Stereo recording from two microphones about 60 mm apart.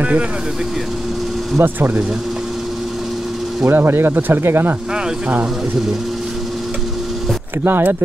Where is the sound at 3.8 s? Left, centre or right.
Right.